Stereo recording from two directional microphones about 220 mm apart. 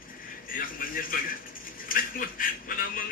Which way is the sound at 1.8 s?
40° left (ahead or behind).